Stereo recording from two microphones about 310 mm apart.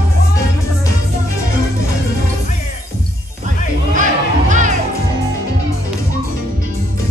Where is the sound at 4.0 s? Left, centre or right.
Right.